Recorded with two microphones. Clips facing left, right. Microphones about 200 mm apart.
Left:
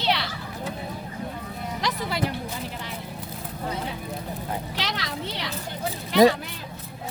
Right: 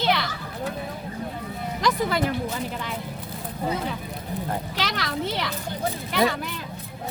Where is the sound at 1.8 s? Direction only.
50° right (ahead or behind).